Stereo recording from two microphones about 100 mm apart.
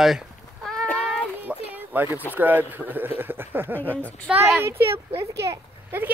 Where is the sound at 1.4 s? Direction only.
15° right (ahead or behind).